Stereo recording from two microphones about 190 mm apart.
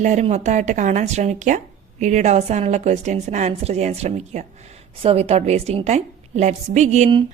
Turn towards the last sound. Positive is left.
turn(degrees=-35)  # may be behind; listen again after turning